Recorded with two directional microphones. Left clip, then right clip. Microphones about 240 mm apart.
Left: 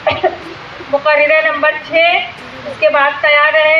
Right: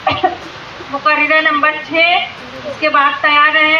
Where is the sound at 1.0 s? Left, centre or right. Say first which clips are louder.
Left 1 dB; left.